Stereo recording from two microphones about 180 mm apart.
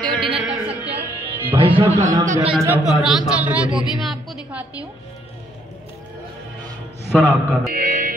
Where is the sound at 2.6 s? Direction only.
5° right (ahead or behind).